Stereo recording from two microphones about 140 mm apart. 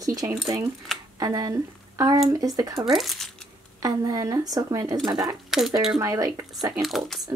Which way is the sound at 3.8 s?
25° right (ahead or behind).